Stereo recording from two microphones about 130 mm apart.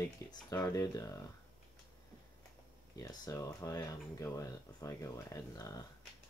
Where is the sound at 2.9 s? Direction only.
30° left (ahead or behind).